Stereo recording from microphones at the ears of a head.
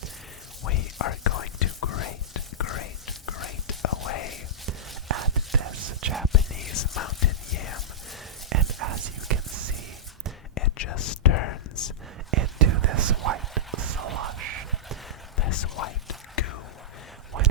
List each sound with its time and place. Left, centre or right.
0.6 s whispering: left
5.0 s whispering: right
6.3 s whispering: left
8.4 s a sound: right
10.5 s whispering: left
12.3 s whispering: right
15.4 s whispering: left